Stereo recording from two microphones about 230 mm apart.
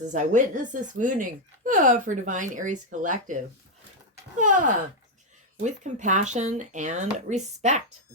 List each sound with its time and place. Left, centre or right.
0.1 s a woman's voice: right
4.4 s a woman's voice: right